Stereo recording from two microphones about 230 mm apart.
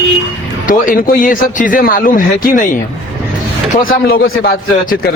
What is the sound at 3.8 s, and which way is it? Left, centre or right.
A man's voice, left.